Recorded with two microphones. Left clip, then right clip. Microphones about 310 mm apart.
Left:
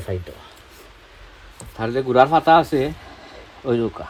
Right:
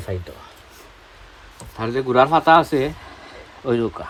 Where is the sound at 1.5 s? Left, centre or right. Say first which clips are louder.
Even; centre.